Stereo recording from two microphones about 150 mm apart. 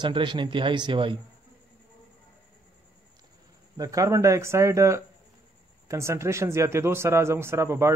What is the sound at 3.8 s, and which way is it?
A man's voice, 20° right (ahead or behind).